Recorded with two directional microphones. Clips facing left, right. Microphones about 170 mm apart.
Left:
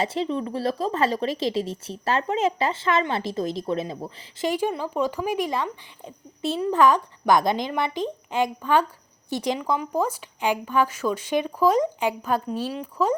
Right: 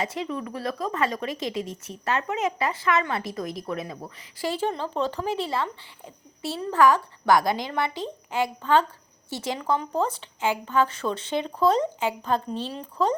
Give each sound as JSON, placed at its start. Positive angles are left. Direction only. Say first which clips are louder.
{"t": 0.0, "sound": "speech", "louder": "left 4 dB", "side_deg": 30}